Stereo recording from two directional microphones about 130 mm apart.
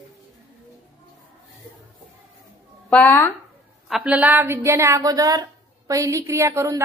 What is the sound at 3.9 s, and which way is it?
A woman's voice, 5° right (ahead or behind).